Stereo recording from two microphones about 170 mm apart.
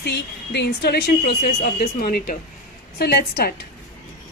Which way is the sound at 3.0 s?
70° left (ahead or behind).